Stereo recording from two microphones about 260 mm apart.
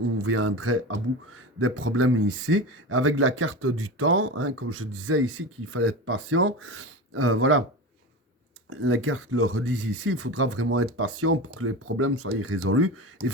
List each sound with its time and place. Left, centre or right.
0.2 s speech: right
8.7 s speech: right